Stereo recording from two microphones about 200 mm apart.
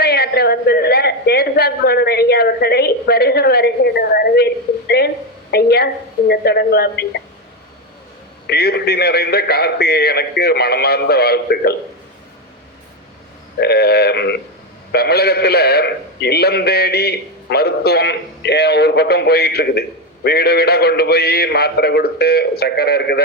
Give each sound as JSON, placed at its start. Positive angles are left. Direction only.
{"t": 0.0, "sound": "a woman's voice", "side_deg": 50}
{"t": 8.4, "sound": "a woman's voice", "side_deg": 55}
{"t": 13.6, "sound": "a woman's voice", "side_deg": 50}